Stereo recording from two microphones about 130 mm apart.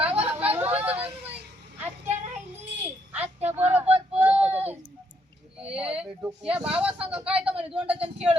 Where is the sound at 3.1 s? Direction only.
15° right (ahead or behind).